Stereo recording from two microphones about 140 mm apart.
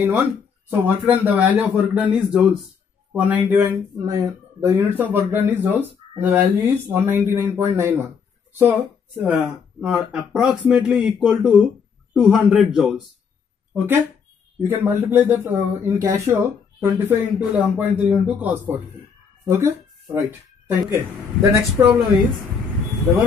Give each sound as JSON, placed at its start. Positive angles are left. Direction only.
{"t": 0.0, "sound": "speech", "side_deg": -15}
{"t": 4.6, "sound": "speech", "side_deg": -15}
{"t": 14.6, "sound": "speech", "side_deg": -20}